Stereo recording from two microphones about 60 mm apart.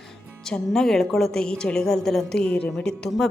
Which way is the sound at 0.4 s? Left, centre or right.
Centre.